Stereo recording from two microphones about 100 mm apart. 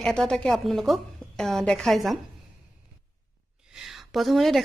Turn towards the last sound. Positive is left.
turn(degrees=0)  # may be behind; listen again after turning